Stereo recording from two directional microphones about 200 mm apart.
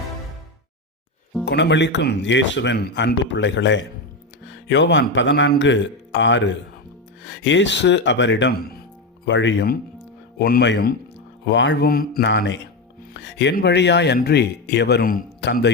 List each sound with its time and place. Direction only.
1.5 s a man's voice: 60° left (ahead or behind)
10.3 s a man's voice: 50° left (ahead or behind)
12.2 s a man's voice: 65° left (ahead or behind)